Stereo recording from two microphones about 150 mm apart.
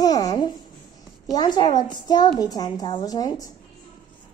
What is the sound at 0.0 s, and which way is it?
Babbling, 25° left (ahead or behind).